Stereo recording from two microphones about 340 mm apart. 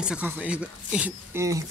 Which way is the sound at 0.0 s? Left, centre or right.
Centre.